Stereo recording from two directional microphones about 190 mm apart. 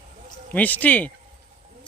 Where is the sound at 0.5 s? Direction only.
10° left (ahead or behind).